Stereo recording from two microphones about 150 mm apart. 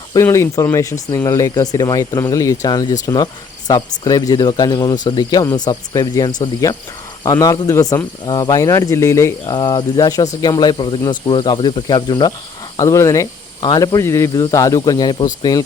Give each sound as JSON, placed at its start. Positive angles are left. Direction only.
{"t": 0.1, "sound": "speech", "side_deg": 20}